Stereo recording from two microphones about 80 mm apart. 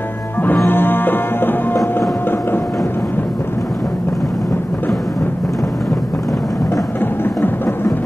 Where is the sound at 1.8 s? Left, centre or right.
Left.